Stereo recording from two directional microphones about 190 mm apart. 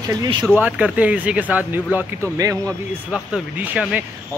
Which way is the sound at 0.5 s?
10° right (ahead or behind).